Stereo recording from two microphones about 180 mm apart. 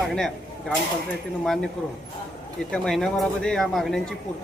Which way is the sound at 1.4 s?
5° left (ahead or behind).